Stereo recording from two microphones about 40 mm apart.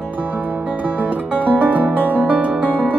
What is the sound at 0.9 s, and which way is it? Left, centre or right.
Music, right.